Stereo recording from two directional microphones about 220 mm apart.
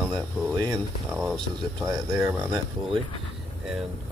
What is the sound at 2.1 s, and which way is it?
Speech, 10° right (ahead or behind).